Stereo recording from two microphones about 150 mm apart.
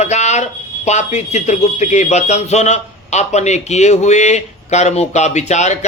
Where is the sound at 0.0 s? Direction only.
50° left (ahead or behind).